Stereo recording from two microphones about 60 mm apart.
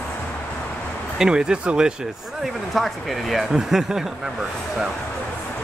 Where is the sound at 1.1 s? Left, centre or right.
Centre.